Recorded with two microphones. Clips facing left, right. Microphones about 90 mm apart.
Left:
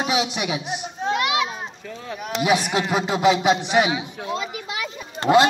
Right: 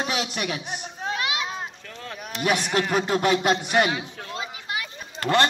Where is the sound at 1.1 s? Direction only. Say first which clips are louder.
Left 6 dB; 90° left.